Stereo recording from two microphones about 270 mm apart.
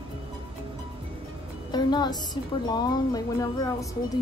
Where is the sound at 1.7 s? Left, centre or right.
Centre.